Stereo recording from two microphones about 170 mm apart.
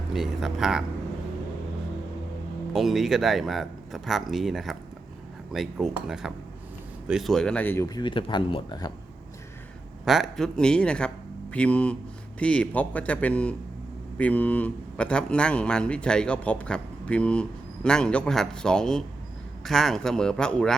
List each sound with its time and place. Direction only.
0.1 s speech: centre (ahead or behind)
2.7 s speech: centre (ahead or behind)
7.9 s speech: 25° left (ahead or behind)
10.1 s speech: centre (ahead or behind)